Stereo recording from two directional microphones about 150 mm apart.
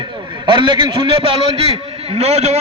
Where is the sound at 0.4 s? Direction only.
30° right (ahead or behind).